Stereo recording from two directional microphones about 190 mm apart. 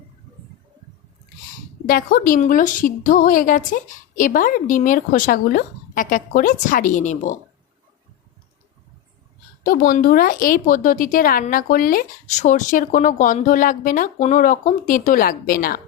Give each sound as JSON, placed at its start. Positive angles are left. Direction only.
{"t": 1.9, "sound": "speech", "side_deg": 50}
{"t": 9.6, "sound": "speech", "side_deg": 50}